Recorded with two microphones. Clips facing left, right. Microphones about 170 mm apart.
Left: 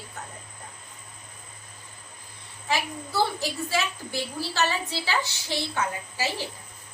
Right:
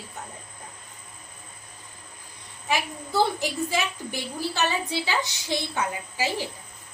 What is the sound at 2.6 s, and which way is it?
A woman's voice, 15° right (ahead or behind).